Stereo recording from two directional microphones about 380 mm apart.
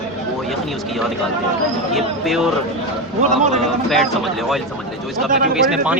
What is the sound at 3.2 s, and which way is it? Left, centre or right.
Speech, centre.